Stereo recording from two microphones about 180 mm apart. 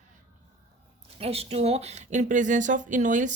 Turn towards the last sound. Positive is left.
turn(degrees=-45)  # may be behind; listen again after turning